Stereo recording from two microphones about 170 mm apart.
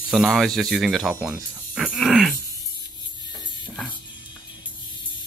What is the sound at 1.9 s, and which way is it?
Groan, centre (ahead or behind).